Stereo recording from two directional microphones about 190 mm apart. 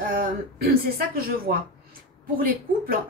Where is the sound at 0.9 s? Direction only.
50° right (ahead or behind).